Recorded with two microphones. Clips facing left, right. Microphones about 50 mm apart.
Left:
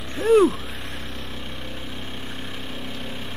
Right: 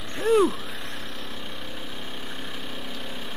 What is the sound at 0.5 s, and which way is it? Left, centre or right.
Vehicle, centre.